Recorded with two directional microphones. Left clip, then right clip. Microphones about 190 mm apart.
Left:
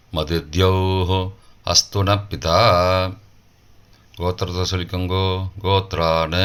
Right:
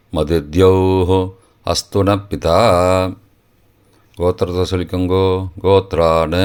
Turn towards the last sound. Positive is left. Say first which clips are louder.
# right 5 dB
turn(degrees=-45)  # may be behind; listen again after turning